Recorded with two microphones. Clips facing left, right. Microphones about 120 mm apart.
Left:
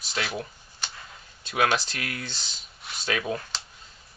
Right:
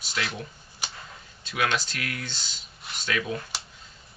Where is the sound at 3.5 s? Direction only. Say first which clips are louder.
Even; 10° right (ahead or behind).